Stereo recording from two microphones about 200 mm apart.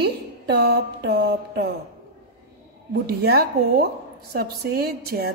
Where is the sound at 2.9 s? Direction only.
50° right (ahead or behind).